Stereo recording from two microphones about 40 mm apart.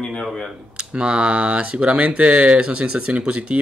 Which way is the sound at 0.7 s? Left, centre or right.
Right.